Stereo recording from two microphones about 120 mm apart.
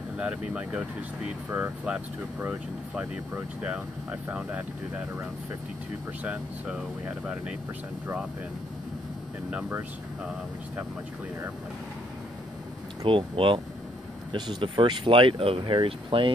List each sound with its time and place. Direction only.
0.2 s speech: 10° right (ahead or behind)
6.2 s speech: 10° right (ahead or behind)
9.5 s speech: 15° right (ahead or behind)
13.0 s speech: 45° right (ahead or behind)